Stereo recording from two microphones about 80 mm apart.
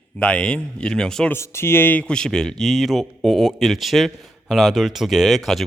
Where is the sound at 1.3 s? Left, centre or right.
Left.